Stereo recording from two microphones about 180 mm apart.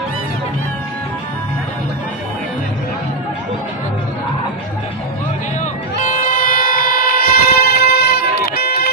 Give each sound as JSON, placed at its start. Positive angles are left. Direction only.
{"t": 5.9, "sound": "vehicle", "side_deg": 50}